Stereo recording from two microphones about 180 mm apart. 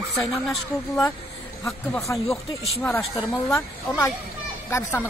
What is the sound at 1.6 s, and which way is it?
Speech, 15° left (ahead or behind).